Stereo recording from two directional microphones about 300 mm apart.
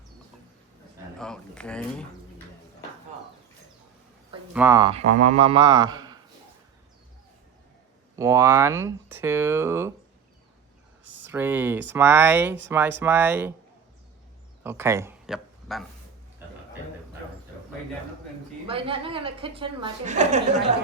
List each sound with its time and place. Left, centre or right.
1.2 s speech: centre
4.5 s a woman's voice: centre
8.1 s a woman's voice: centre
11.0 s a sound: right
11.3 s a woman's voice: centre
14.6 s speech: centre
18.7 s a woman's voice: centre